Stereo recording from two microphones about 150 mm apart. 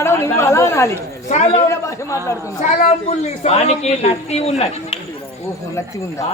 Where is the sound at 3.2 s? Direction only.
45° left (ahead or behind).